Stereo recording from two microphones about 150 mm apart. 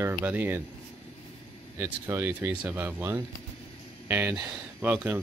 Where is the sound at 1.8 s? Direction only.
15° right (ahead or behind).